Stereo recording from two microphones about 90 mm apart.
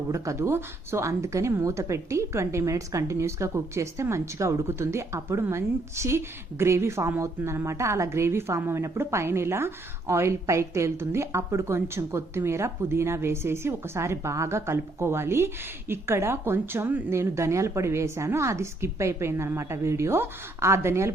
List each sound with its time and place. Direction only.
0.1 s a woman's voice: 35° right (ahead or behind)